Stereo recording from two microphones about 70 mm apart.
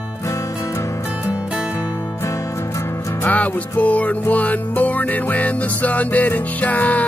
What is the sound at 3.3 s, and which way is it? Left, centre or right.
Music, left.